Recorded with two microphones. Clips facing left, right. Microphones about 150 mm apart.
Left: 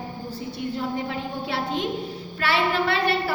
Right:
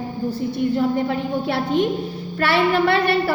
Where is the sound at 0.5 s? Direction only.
60° right (ahead or behind).